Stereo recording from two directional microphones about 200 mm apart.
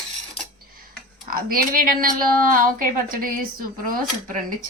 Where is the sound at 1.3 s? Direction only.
45° right (ahead or behind).